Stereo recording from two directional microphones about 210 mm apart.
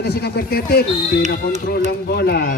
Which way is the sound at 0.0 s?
50° left (ahead or behind).